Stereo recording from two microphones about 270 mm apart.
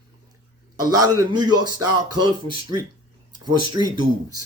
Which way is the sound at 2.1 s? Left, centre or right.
Centre.